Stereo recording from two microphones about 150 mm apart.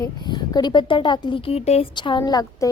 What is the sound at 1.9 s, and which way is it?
Speech, 30° left (ahead or behind).